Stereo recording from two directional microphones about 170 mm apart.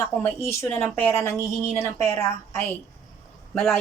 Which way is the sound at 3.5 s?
5° left (ahead or behind).